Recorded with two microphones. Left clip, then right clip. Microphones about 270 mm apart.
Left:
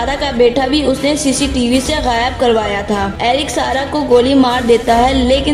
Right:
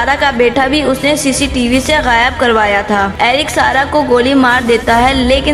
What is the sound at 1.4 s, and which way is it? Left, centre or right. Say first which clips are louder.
Speech: right 2 dB; right.